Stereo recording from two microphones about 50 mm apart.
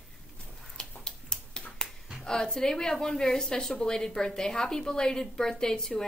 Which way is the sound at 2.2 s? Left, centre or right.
Centre.